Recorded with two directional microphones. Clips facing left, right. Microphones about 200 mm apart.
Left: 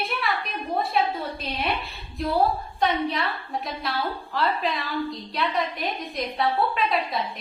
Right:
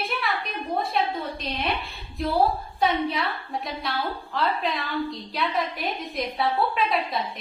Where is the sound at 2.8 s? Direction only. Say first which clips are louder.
Even; centre (ahead or behind).